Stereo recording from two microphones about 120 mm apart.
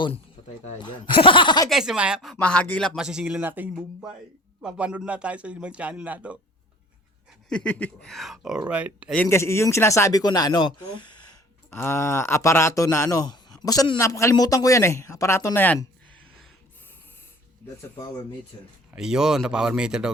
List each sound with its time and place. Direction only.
0.8 s speech: 45° left (ahead or behind)
1.7 s speech: 5° right (ahead or behind)
2.4 s a sound: 10° left (ahead or behind)
2.9 s a man's voice: 5° right (ahead or behind)
7.5 s a sound: 10° left (ahead or behind)
8.1 s speech: centre (ahead or behind)
9.3 s speech: 20° left (ahead or behind); by 11.2 s 40° left (ahead or behind)
11.7 s speech: 20° left (ahead or behind)
18.9 s speech: 5° right (ahead or behind)